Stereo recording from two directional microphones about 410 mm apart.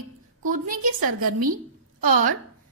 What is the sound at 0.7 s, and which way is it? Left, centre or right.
A woman's voice, right.